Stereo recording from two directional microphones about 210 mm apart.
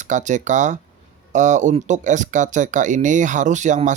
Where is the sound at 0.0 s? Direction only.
35° right (ahead or behind).